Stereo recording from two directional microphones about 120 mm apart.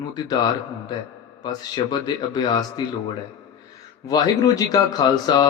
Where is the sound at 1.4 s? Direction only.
35° left (ahead or behind).